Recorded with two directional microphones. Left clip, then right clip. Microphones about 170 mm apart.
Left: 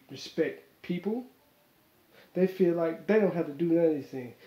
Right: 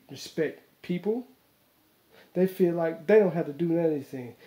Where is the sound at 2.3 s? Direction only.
45° right (ahead or behind).